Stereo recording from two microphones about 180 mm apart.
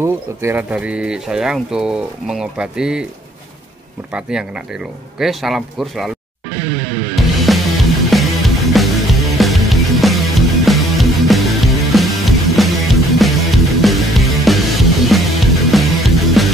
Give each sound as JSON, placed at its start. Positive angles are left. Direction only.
{"t": 0.0, "sound": "speech", "side_deg": -15}
{"t": 4.1, "sound": "speech", "side_deg": -5}
{"t": 7.2, "sound": "music", "side_deg": 0}